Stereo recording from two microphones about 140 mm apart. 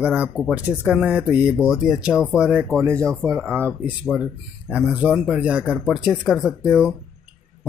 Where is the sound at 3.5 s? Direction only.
15° right (ahead or behind).